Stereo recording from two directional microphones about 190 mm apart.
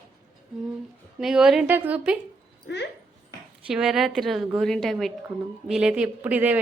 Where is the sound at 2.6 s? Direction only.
65° left (ahead or behind).